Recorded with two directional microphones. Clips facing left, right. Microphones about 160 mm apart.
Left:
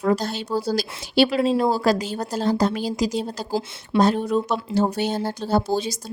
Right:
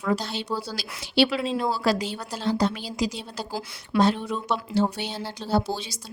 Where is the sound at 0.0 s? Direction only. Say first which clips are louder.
Left 5 dB; 45° left (ahead or behind).